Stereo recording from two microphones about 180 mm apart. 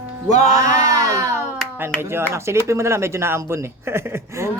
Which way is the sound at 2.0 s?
15° right (ahead or behind).